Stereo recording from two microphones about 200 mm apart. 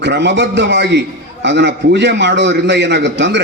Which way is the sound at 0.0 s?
60° right (ahead or behind).